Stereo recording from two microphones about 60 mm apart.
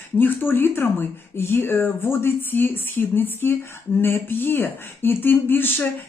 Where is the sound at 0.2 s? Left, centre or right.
Left.